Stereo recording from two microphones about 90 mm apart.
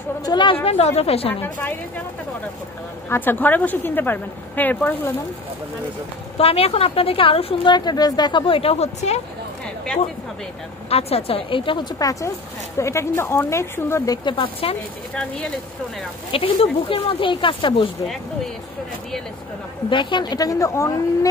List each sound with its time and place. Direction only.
0.2 s a woman's voice: 55° left (ahead or behind)
0.7 s a woman's voice: 90° left
1.4 s a woman's voice: 20° left (ahead or behind)
3.1 s a woman's voice: 20° left (ahead or behind)
6.3 s a woman's voice: 90° left
10.9 s a woman's voice: 90° left; by 11.9 s 70° left (ahead or behind)
12.0 s speech: 40° left (ahead or behind)
14.2 s a woman's voice: 75° left (ahead or behind)
16.3 s speech: 90° left
18.0 s speech: 5° left (ahead or behind)
19.9 s a woman's voice: 60° left (ahead or behind)
20.3 s speech: 40° left (ahead or behind)